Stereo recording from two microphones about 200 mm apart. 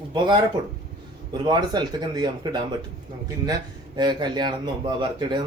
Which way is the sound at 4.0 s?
20° right (ahead or behind).